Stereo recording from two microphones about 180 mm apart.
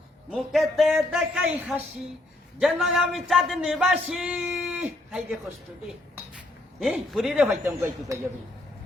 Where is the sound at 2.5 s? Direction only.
Centre (ahead or behind).